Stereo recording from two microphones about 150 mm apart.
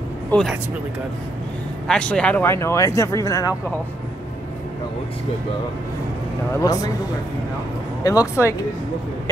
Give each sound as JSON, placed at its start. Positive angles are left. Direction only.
{"t": 0.3, "sound": "a man's voice", "side_deg": 5}
{"t": 1.9, "sound": "speech", "side_deg": 5}
{"t": 6.6, "sound": "speech", "side_deg": 25}
{"t": 8.0, "sound": "speech", "side_deg": 25}